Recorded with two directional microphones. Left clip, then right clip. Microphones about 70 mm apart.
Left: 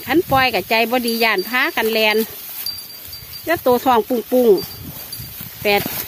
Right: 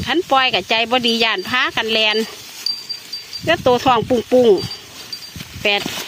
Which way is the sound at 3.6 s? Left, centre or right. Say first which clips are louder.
Even; centre.